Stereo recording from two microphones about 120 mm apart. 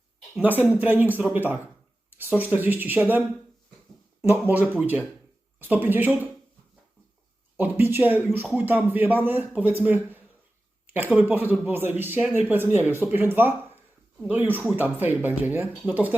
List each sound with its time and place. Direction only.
0.6 s a man's voice: 15° right (ahead or behind)
7.5 s a man's voice: 15° right (ahead or behind)
10.8 s a sound: 15° right (ahead or behind)
11.1 s a man's voice: 15° right (ahead or behind)